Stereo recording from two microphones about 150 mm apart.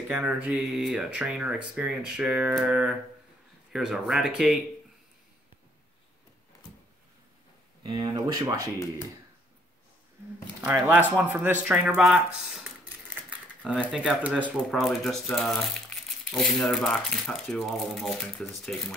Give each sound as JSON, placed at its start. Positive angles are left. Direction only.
{"t": 0.1, "sound": "speech", "side_deg": -10}
{"t": 7.8, "sound": "speech", "side_deg": -30}
{"t": 10.6, "sound": "speech", "side_deg": -10}
{"t": 13.6, "sound": "speech", "side_deg": 5}
{"t": 14.2, "sound": "speech", "side_deg": -10}